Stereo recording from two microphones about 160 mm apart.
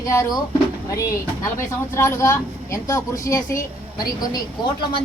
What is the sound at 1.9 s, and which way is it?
Speech, 15° left (ahead or behind).